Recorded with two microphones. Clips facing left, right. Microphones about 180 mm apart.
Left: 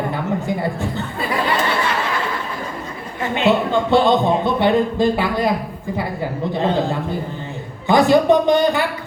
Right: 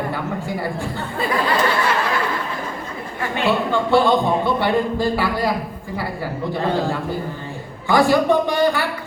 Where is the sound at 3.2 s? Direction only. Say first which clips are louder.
Left 3 dB; 20° left (ahead or behind).